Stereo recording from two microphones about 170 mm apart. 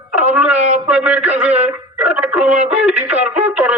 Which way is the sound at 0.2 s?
10° right (ahead or behind).